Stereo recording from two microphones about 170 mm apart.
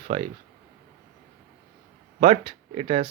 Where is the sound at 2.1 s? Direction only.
40° right (ahead or behind).